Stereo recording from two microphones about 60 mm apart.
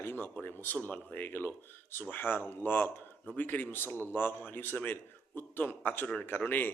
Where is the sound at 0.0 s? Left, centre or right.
Left.